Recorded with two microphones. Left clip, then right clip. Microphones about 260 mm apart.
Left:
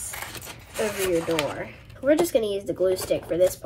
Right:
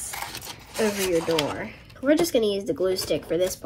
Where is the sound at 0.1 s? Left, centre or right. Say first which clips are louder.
Right 3 dB; centre.